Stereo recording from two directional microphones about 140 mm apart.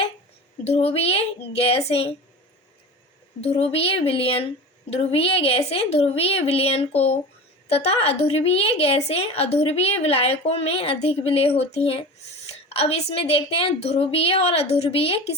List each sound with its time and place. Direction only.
0.6 s a woman's voice: 50° left (ahead or behind)
3.4 s a woman's voice: 45° left (ahead or behind)